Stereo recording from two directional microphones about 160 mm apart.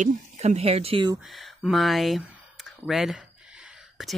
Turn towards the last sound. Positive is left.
turn(degrees=0)  # may be behind; listen again after turning